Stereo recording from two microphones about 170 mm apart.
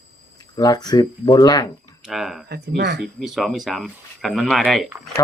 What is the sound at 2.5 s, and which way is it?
Speech, 65° right (ahead or behind).